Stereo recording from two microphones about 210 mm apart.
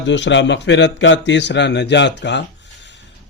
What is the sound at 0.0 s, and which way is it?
A man's voice, 60° left (ahead or behind).